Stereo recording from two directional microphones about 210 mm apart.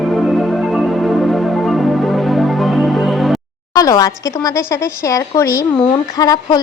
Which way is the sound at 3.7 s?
15° left (ahead or behind).